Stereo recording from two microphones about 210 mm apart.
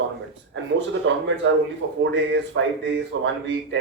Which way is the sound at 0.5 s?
60° right (ahead or behind).